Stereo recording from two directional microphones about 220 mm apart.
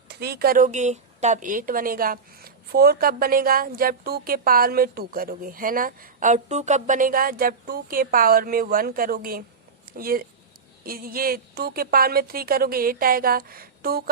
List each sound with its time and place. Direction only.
0.1 s a woman's voice: 50° right (ahead or behind)